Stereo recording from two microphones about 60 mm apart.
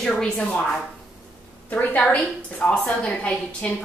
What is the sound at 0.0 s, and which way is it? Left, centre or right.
Speech, centre.